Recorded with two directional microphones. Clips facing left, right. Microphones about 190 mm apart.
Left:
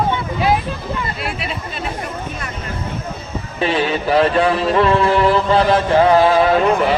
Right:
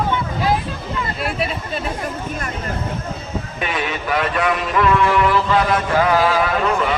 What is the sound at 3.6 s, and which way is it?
Speech, 30° left (ahead or behind).